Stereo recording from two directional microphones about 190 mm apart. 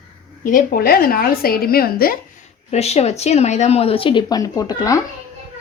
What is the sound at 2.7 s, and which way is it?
Speech, 35° left (ahead or behind).